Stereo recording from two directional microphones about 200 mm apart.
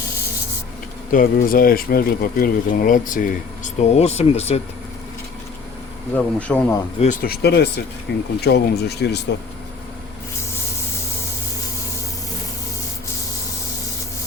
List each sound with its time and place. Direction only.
1.1 s speech: 45° left (ahead or behind)
6.1 s speech: 5° left (ahead or behind)
7.0 s speech: 40° left (ahead or behind)